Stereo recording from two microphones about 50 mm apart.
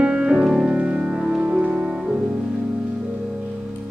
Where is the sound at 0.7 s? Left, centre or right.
Right.